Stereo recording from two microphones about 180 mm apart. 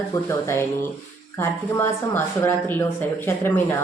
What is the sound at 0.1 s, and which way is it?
Speech, 15° left (ahead or behind).